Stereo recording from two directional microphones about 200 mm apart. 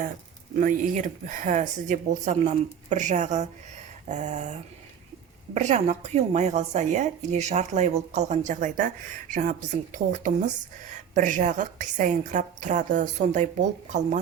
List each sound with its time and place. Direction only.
0.5 s a woman's voice: 40° right (ahead or behind)
5.5 s a woman's voice: 35° right (ahead or behind)